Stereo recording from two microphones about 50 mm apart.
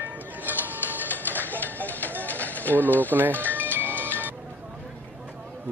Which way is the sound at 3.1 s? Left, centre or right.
Right.